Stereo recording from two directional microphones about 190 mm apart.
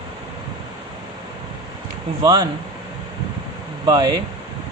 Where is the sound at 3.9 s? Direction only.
20° right (ahead or behind).